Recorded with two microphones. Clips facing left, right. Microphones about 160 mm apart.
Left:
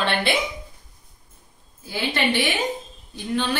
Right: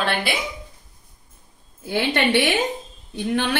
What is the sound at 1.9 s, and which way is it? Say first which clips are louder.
A woman's voice: right 4 dB; 65° right (ahead or behind).